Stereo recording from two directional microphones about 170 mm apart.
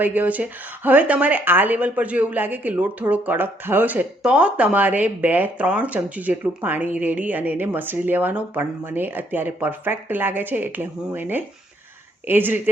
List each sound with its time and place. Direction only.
0.0 s speech: 10° right (ahead or behind)